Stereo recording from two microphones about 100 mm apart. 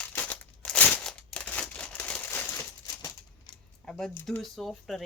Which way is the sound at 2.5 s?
35° left (ahead or behind).